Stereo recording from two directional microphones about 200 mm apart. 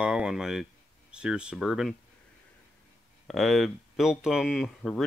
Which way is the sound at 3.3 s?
Centre (ahead or behind).